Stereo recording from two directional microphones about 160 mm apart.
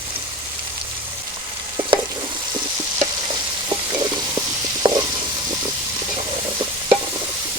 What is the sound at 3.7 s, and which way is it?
Stir, 25° right (ahead or behind).